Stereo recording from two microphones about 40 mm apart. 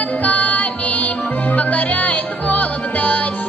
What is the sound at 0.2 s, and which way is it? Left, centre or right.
Music, left.